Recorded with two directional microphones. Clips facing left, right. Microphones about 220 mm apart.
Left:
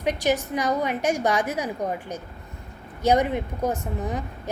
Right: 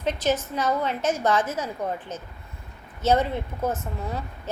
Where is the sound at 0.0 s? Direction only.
15° left (ahead or behind).